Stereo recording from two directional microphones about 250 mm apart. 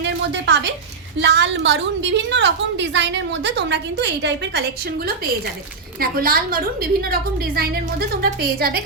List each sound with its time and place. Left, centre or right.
0.0 s a sound: right
1.2 s a woman's voice: right
6.0 s a woman's voice: right